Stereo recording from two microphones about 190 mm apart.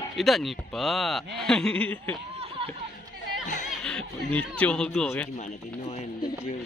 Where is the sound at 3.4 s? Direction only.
40° left (ahead or behind).